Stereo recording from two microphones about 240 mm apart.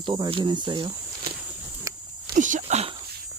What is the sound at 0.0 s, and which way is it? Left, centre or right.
Speech, centre.